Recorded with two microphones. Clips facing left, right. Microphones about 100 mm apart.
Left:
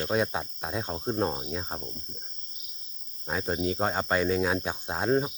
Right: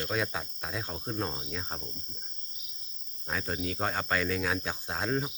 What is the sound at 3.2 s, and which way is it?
Speech, 20° left (ahead or behind).